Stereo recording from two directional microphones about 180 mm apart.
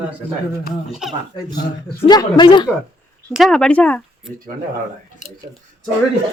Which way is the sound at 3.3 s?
Centre (ahead or behind).